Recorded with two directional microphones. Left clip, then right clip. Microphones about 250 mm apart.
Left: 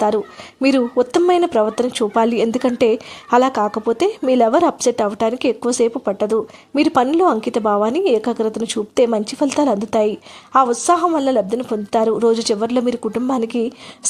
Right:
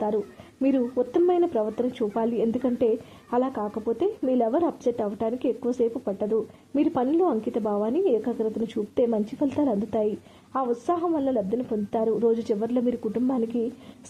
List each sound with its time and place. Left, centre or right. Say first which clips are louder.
0.6 s a woman's voice: left 9 dB; centre